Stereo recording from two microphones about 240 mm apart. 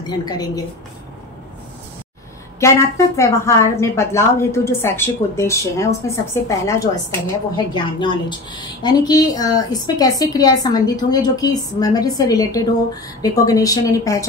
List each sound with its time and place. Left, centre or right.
0.0 s a woman's voice: centre
2.6 s a woman's voice: centre